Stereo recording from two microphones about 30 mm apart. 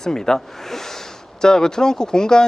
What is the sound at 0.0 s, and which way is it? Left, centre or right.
Speech, centre.